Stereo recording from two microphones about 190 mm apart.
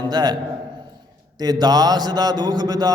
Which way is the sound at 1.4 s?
20° right (ahead or behind).